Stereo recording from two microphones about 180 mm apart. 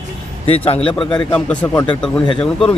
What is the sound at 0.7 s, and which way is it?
Speech, 35° left (ahead or behind).